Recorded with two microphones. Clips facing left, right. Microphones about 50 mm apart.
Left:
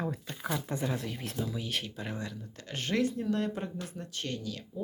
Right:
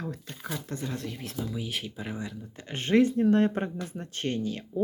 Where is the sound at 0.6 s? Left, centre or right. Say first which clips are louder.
Left 2 dB; centre.